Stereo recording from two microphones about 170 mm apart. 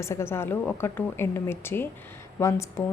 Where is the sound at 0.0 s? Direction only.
15° left (ahead or behind).